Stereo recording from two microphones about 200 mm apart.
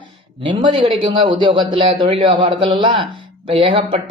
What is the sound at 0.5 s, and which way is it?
A man's voice, 25° right (ahead or behind).